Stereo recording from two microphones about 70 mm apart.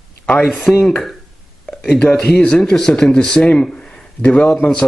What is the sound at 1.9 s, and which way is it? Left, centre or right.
Speech, centre.